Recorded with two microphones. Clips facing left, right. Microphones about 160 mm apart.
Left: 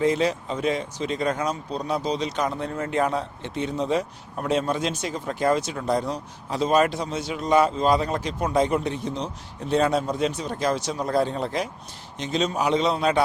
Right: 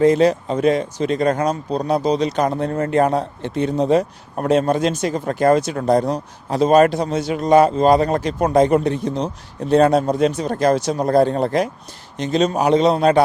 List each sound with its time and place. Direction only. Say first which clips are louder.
0.0 s speech: right 8 dB; 40° right (ahead or behind); by 8.5 s 60° right (ahead or behind)
8.5 s speech: right 7 dB; 45° right (ahead or behind)